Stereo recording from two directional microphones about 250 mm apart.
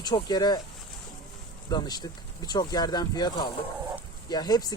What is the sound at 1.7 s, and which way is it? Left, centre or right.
Speech, centre.